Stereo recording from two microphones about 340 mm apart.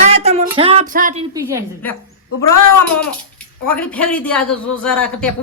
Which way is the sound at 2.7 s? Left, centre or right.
Left.